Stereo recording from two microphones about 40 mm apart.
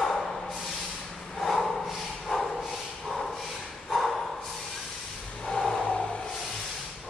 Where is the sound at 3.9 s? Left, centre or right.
Centre.